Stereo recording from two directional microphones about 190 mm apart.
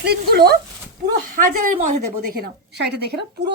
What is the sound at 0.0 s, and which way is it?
Speech, 55° right (ahead or behind).